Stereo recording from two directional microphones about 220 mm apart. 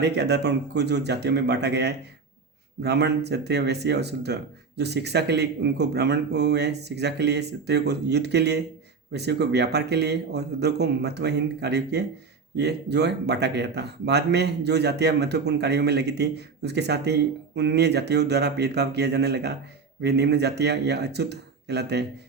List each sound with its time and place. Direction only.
0.0 s speech: 50° right (ahead or behind)